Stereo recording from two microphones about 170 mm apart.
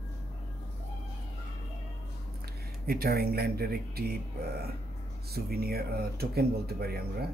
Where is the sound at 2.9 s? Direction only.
65° right (ahead or behind).